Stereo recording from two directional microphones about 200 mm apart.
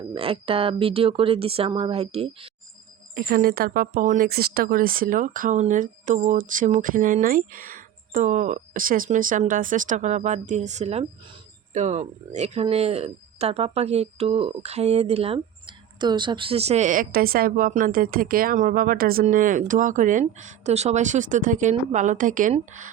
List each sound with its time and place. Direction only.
0.1 s speech: 25° right (ahead or behind)
3.2 s speech: 50° right (ahead or behind)